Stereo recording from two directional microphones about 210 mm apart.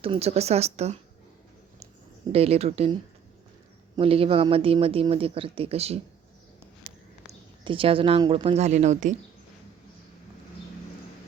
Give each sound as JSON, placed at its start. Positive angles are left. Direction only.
{"t": 0.0, "sound": "speech", "side_deg": -30}
{"t": 2.3, "sound": "speech", "side_deg": -30}
{"t": 7.3, "sound": "a woman's voice", "side_deg": -25}